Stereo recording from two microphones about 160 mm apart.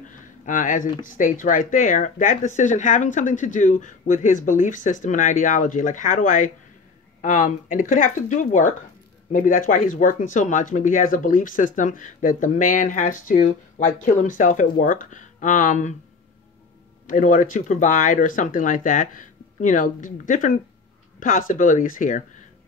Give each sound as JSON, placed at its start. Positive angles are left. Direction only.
{"t": 0.0, "sound": "speech", "side_deg": 55}
{"t": 17.0, "sound": "speech", "side_deg": 55}